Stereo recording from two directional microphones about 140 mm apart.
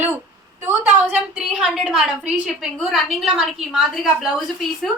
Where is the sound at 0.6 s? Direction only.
15° right (ahead or behind).